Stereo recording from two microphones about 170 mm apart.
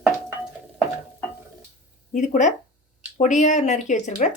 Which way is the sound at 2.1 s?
50° left (ahead or behind).